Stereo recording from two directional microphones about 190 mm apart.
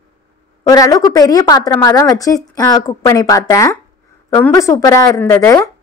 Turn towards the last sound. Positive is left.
turn(degrees=10)  # may be behind; listen again after turning